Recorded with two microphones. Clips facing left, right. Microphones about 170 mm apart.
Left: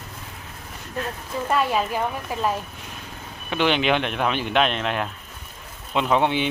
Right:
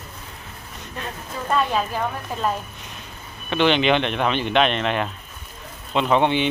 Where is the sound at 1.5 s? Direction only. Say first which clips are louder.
Even; 10° left (ahead or behind).